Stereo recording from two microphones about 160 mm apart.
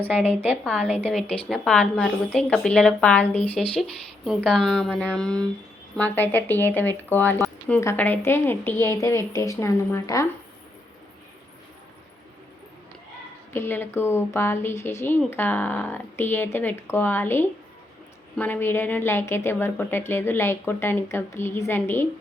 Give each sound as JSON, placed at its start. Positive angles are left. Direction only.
{"t": 0.4, "sound": "a woman's voice", "side_deg": -5}
{"t": 13.5, "sound": "a woman's voice", "side_deg": 15}